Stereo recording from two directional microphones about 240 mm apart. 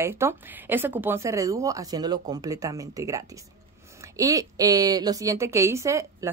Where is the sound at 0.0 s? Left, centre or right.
Centre.